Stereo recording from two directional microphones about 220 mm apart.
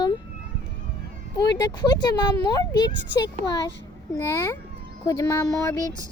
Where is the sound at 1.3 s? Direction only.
20° left (ahead or behind).